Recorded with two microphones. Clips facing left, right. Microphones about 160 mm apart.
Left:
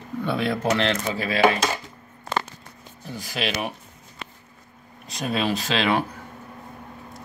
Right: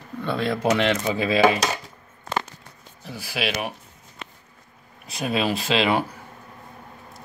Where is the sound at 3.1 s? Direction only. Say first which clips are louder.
Even; 5° right (ahead or behind).